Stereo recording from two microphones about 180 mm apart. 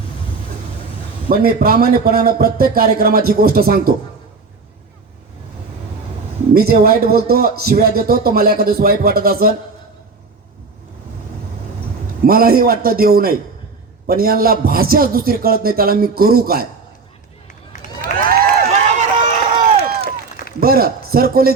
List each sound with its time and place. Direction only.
1.3 s a man's voice: 55° right (ahead or behind)
6.5 s a man's voice: 60° right (ahead or behind)
12.2 s a man's voice: 55° right (ahead or behind)
18.3 s run: 45° right (ahead or behind)
20.6 s speech: 55° right (ahead or behind)